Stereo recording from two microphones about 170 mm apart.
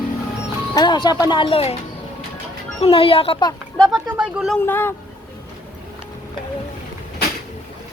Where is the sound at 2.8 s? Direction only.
35° left (ahead or behind).